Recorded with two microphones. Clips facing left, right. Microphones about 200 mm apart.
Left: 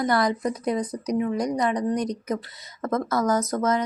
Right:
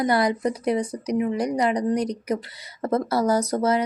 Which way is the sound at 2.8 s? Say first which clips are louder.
Right 2 dB; 30° right (ahead or behind).